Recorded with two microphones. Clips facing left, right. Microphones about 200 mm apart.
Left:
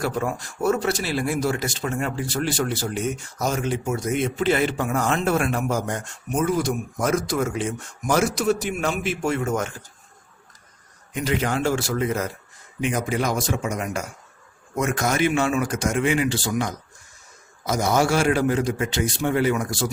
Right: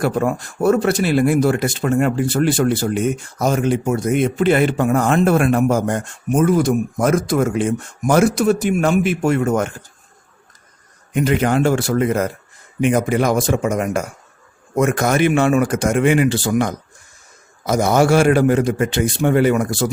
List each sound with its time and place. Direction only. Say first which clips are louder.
0.0 s speech: right 7 dB; 55° right (ahead or behind)
11.1 s speech: right 7 dB; 55° right (ahead or behind)